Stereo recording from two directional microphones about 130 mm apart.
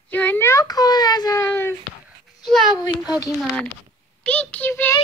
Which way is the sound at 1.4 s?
15° left (ahead or behind).